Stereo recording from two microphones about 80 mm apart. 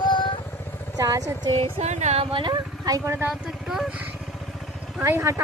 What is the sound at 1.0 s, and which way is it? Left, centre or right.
Speech, right.